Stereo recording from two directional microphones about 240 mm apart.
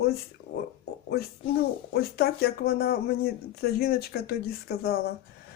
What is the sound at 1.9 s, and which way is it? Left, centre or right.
Speech, left.